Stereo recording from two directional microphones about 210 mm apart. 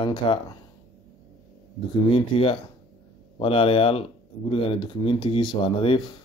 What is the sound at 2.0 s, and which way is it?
Speech, 25° left (ahead or behind).